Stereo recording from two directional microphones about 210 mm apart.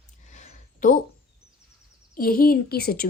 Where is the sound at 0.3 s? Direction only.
35° left (ahead or behind).